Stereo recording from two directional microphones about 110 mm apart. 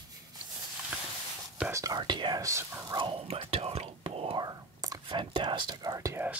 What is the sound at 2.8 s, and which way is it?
Speech, 45° right (ahead or behind).